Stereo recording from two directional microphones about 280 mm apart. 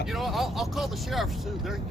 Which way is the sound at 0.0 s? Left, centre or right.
Centre.